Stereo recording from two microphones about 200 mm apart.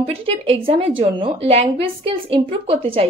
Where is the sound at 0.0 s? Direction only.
30° right (ahead or behind).